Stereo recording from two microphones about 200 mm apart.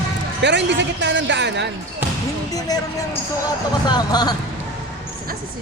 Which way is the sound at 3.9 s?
20° left (ahead or behind).